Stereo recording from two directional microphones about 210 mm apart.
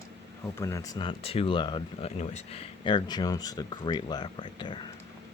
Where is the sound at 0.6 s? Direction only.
15° left (ahead or behind).